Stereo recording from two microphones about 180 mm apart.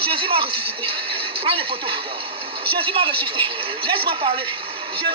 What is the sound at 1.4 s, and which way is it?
Speech, 30° right (ahead or behind).